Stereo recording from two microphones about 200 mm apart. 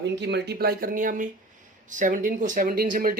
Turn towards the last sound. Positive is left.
turn(degrees=-45)  # may be behind; listen again after turning